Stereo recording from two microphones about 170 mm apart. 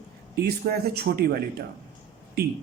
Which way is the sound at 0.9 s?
70° right (ahead or behind).